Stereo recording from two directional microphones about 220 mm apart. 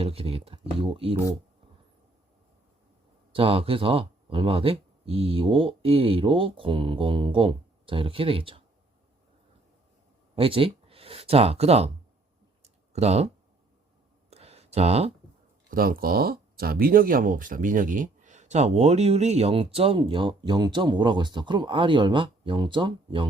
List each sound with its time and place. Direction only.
0.0 s speech: 25° right (ahead or behind)
3.3 s speech: 25° right (ahead or behind)
10.3 s speech: 25° right (ahead or behind)
12.6 s clicking: 30° right (ahead or behind)
14.3 s a sound: 30° right (ahead or behind)
15.7 s speech: 40° right (ahead or behind); by 23.3 s 20° right (ahead or behind)